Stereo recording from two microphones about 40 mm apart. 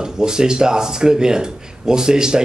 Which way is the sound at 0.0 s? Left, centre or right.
Centre.